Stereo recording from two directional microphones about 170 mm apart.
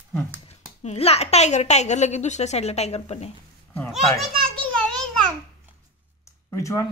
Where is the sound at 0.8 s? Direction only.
40° left (ahead or behind).